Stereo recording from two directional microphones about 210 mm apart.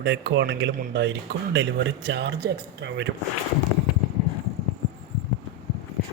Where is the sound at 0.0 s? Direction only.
55° right (ahead or behind).